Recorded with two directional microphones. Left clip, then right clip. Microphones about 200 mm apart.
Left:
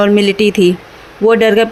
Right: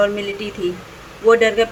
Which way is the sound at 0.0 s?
45° left (ahead or behind).